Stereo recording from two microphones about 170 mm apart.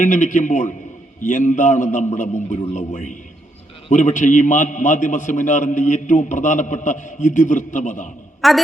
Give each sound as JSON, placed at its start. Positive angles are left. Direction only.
{"t": 0.0, "sound": "a man's voice", "side_deg": 50}
{"t": 8.4, "sound": "a woman's voice", "side_deg": 0}